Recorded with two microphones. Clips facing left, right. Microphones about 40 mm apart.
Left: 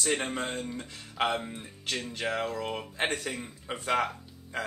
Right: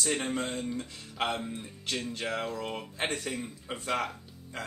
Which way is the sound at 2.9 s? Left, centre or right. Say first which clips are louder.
Left 2 dB; left.